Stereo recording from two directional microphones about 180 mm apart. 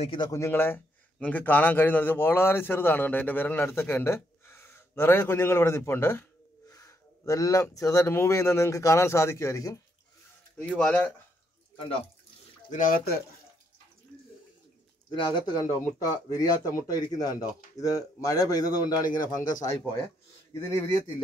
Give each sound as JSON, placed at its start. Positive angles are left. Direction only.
{"t": 0.0, "sound": "speech", "side_deg": 30}
{"t": 0.3, "sound": "a man's voice", "side_deg": 15}
{"t": 12.7, "sound": "speech", "side_deg": 50}
{"t": 15.3, "sound": "speech", "side_deg": 25}
{"t": 19.2, "sound": "speech", "side_deg": 45}